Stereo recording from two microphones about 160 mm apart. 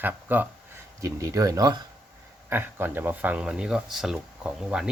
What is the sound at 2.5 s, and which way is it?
Speech, 15° right (ahead or behind).